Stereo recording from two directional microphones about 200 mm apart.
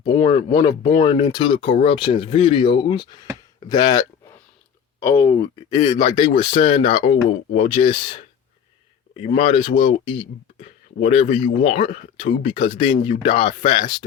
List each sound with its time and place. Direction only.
0.0 s speech: 30° left (ahead or behind)
5.8 s speech: 30° left (ahead or behind)